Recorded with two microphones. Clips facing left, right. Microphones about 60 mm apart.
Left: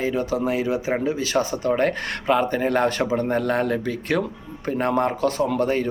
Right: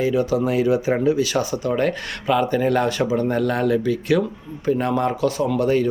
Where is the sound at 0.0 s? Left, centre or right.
Left.